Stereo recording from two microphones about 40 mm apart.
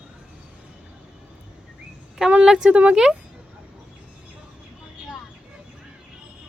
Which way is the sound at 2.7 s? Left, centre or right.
Right.